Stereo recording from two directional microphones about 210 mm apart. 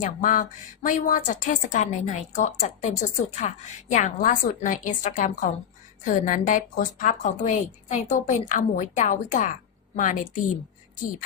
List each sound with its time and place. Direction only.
0.0 s a woman's voice: 40° left (ahead or behind)